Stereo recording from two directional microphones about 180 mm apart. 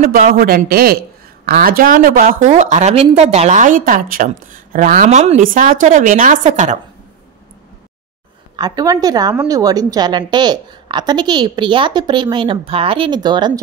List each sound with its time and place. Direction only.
0.0 s a man's voice: 50° right (ahead or behind)
2.4 s a woman's voice: 40° right (ahead or behind)
8.5 s a woman's voice: 20° right (ahead or behind)